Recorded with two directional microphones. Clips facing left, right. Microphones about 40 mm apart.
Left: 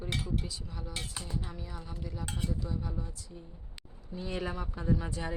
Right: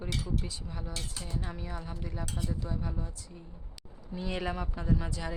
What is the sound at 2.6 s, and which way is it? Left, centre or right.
Speech, centre.